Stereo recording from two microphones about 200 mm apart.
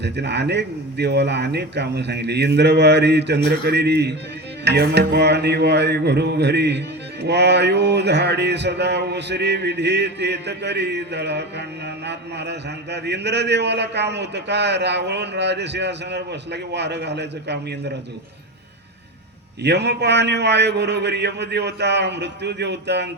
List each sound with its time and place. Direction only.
0.0 s mantra: 60° right (ahead or behind)
19.6 s mantra: 60° right (ahead or behind)